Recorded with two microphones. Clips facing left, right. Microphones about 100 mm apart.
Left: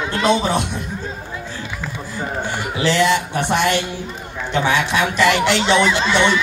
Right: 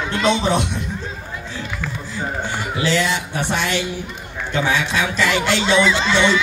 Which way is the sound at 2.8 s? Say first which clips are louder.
Left 4 dB; 60° left (ahead or behind).